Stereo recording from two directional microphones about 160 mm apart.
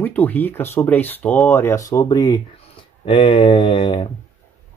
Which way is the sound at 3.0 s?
35° left (ahead or behind).